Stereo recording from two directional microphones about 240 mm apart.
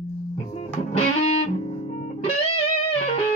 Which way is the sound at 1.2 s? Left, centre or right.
Left.